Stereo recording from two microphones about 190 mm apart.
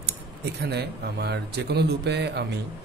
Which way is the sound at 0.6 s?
60° right (ahead or behind).